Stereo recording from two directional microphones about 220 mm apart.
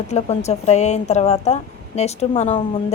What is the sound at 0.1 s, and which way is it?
A woman's voice, 30° left (ahead or behind).